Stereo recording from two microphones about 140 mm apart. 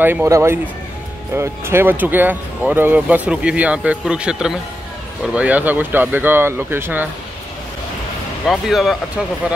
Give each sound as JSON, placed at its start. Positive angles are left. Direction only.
{"t": 0.0, "sound": "speech", "side_deg": -15}
{"t": 8.5, "sound": "speech", "side_deg": 0}